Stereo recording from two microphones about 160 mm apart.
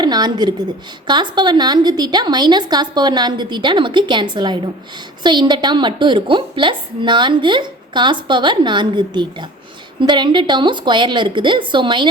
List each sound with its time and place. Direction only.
0.0 s a woman's voice: 25° right (ahead or behind)